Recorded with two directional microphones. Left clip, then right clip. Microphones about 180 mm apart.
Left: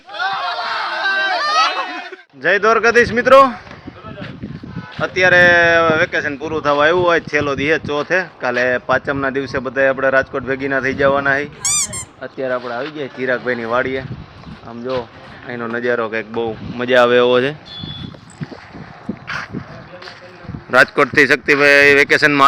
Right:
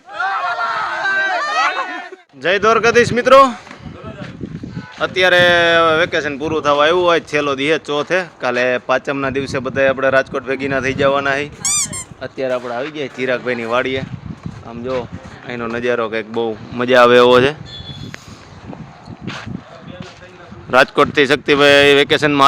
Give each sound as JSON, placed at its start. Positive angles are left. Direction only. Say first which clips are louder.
{"t": 0.1, "sound": "a sound", "louder": "right 1 dB", "side_deg": 0}
{"t": 2.4, "sound": "speech", "louder": "even", "side_deg": -10}
{"t": 4.9, "sound": "speech", "louder": "left 1 dB", "side_deg": -15}
{"t": 12.4, "sound": "speech", "louder": "right 1 dB", "side_deg": -10}
{"t": 14.7, "sound": "speech", "louder": "even", "side_deg": 10}
{"t": 15.4, "sound": "speech", "louder": "even", "side_deg": -5}
{"t": 20.7, "sound": "speech", "louder": "even", "side_deg": -15}